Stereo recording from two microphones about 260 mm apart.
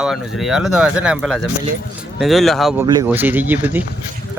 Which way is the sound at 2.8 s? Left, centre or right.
Centre.